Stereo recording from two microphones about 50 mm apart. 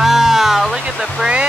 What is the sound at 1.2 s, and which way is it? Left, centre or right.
Speech, right.